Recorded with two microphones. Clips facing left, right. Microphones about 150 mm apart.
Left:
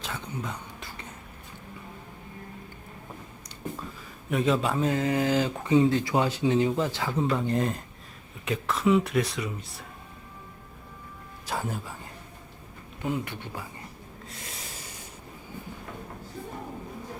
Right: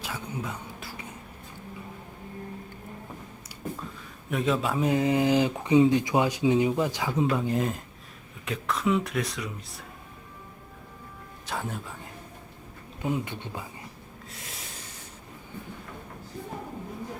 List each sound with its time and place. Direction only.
0.0 s a sound: 5° right (ahead or behind)
4.3 s speech: centre (ahead or behind)
4.8 s speech: 15° right (ahead or behind); by 9.8 s centre (ahead or behind)
11.4 s speech: centre (ahead or behind)
13.0 s speech: 20° right (ahead or behind)
14.3 s snort: centre (ahead or behind)